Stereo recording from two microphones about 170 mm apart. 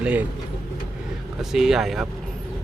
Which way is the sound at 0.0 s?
10° right (ahead or behind).